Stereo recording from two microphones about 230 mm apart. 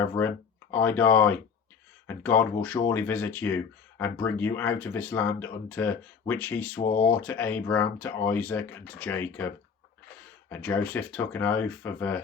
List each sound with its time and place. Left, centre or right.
0.0 s speech: centre
6.8 s speech: left
7.1 s speech: centre
10.5 s speech: centre